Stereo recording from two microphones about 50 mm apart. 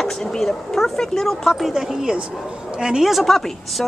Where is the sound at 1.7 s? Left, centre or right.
Centre.